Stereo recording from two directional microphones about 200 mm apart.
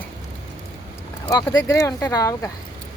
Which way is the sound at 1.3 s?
20° left (ahead or behind).